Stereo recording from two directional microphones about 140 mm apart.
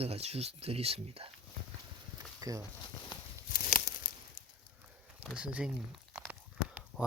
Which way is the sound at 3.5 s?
90° left.